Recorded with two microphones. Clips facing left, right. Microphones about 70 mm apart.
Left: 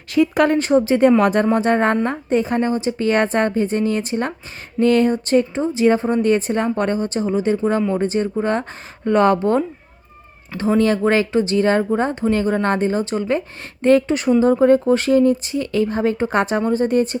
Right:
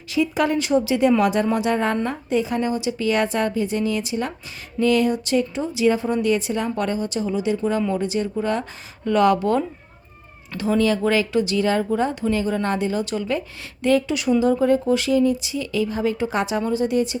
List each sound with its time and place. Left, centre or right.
0.1 s a woman's voice: left
10.6 s speech: left